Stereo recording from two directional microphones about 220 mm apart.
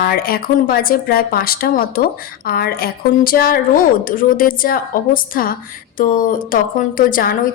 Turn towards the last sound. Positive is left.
turn(degrees=40)  # may be behind; listen again after turning